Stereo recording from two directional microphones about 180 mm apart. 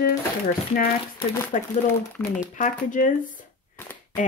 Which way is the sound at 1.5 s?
45° left (ahead or behind).